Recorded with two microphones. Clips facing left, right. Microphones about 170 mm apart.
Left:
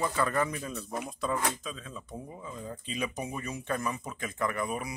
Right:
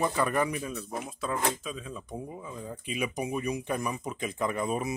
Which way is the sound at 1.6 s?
10° right (ahead or behind).